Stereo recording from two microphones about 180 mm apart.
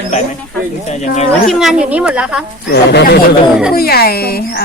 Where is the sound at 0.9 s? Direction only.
40° left (ahead or behind).